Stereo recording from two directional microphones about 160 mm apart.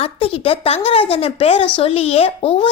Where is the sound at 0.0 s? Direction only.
35° left (ahead or behind).